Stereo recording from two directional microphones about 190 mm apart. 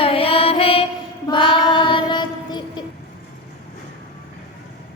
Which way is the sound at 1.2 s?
25° left (ahead or behind).